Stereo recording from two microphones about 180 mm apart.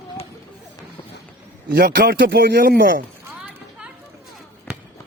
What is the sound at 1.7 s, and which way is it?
Speech, 55° right (ahead or behind).